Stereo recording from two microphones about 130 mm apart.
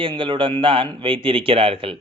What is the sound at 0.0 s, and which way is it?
A man's voice, 40° right (ahead or behind).